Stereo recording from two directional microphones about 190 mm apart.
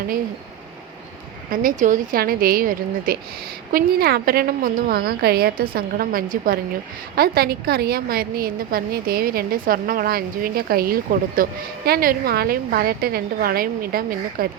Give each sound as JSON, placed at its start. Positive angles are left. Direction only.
{"t": 1.5, "sound": "a woman's voice", "side_deg": -45}